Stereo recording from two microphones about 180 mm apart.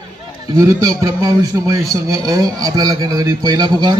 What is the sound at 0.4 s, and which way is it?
A man's voice, 20° right (ahead or behind).